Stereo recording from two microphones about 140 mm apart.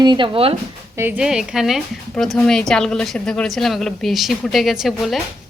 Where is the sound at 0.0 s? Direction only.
35° right (ahead or behind).